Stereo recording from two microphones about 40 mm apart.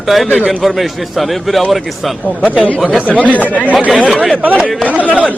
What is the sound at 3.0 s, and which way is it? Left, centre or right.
Speech, right.